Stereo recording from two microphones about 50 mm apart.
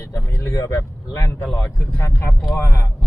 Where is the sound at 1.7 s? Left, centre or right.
Left.